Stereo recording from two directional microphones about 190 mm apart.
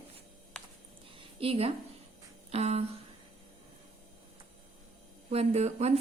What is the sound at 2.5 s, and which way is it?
Speech, 35° right (ahead or behind).